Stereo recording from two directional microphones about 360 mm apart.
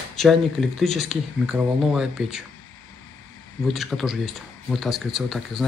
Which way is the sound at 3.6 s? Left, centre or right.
Centre.